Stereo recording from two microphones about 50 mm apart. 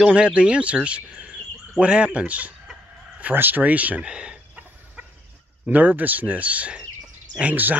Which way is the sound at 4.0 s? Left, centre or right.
Centre.